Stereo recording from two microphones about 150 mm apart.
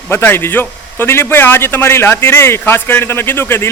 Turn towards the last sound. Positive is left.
turn(degrees=15)  # may be behind; listen again after turning